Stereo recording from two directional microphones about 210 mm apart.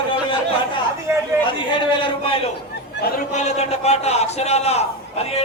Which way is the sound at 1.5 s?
20° left (ahead or behind).